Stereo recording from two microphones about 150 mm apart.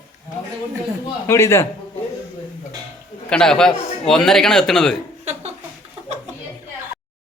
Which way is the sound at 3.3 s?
5° left (ahead or behind).